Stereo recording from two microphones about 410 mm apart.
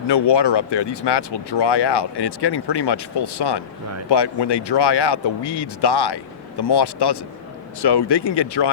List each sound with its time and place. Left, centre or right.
0.1 s speech: left